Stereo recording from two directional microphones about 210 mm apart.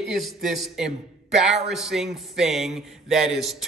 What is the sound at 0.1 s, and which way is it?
Speech, centre (ahead or behind).